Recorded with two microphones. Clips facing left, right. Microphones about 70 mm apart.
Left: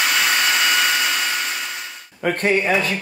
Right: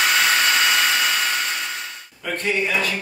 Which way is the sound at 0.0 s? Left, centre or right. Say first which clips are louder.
Right 1 dB; centre.